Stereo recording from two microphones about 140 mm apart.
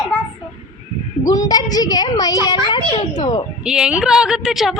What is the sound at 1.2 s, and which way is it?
A woman's voice, 25° left (ahead or behind).